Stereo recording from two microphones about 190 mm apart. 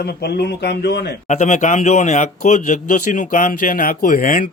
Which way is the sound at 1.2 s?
40° left (ahead or behind).